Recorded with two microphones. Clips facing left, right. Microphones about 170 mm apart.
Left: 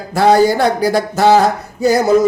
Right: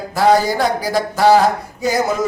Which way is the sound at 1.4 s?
35° left (ahead or behind).